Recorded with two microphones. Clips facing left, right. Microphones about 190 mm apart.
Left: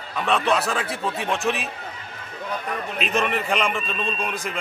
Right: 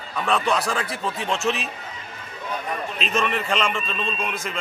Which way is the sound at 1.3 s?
15° left (ahead or behind).